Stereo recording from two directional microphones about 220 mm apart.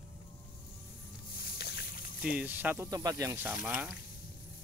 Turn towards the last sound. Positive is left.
turn(degrees=-5)  # may be behind; listen again after turning